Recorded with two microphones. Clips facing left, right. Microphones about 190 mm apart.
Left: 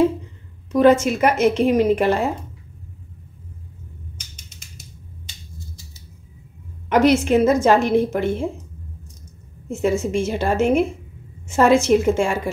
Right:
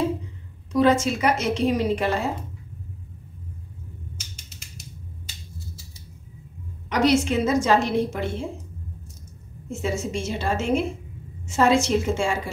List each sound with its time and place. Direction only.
0.7 s a woman's voice: 55° left (ahead or behind)
6.9 s a woman's voice: 55° left (ahead or behind)
9.7 s a woman's voice: 55° left (ahead or behind)